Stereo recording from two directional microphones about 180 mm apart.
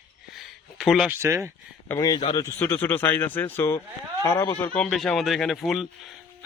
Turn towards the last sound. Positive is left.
turn(degrees=0)  # may be behind; listen again after turning